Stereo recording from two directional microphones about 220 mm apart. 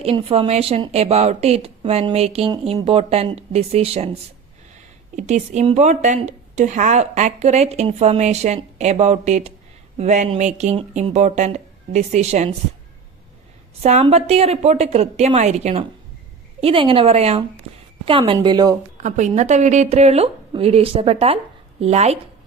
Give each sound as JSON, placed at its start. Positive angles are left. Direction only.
{"t": 0.0, "sound": "a woman's voice", "side_deg": -25}
{"t": 5.1, "sound": "a woman's voice", "side_deg": -30}
{"t": 13.8, "sound": "a woman's voice", "side_deg": -30}
{"t": 19.0, "sound": "a woman's voice", "side_deg": -35}